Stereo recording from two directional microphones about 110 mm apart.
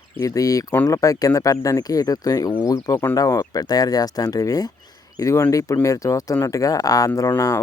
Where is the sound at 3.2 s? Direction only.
30° left (ahead or behind).